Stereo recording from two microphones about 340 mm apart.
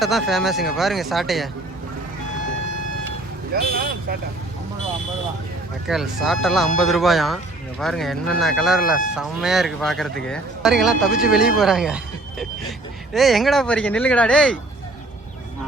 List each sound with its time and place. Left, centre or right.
0.0 s speech: centre
3.5 s speech: right
5.9 s speech: centre